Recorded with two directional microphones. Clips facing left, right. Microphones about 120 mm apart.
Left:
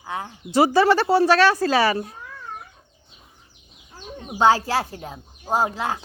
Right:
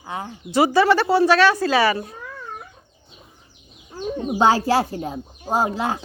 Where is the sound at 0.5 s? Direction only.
40° left (ahead or behind).